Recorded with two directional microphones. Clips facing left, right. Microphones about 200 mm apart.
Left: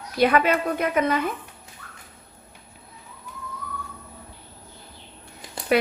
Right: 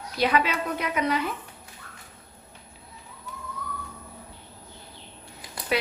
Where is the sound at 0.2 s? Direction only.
50° left (ahead or behind).